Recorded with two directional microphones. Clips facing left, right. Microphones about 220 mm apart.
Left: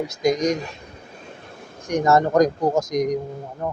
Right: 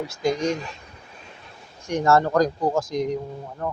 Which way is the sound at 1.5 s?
50° left (ahead or behind).